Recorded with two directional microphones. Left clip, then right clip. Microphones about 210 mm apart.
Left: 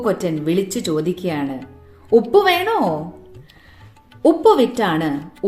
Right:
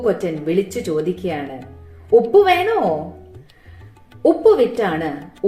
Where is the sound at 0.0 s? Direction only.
45° left (ahead or behind).